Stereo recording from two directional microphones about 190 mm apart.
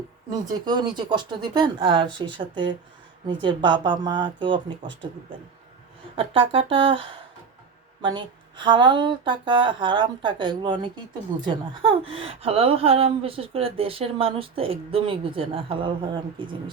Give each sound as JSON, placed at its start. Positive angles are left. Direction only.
{"t": 0.6, "sound": "speech", "side_deg": -20}
{"t": 6.1, "sound": "speech", "side_deg": -25}